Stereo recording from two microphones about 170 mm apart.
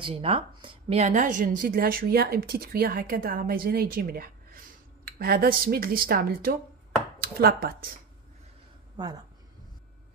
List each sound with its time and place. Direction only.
0.0 s a woman's voice: 35° right (ahead or behind); by 7.9 s 65° right (ahead or behind)
9.0 s speech: 25° right (ahead or behind)